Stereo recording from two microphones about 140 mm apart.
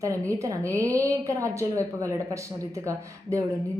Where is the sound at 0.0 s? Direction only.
20° right (ahead or behind).